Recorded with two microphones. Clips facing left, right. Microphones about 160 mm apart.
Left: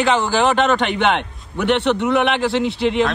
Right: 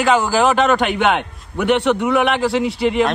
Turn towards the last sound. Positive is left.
turn(degrees=0)  # may be behind; listen again after turning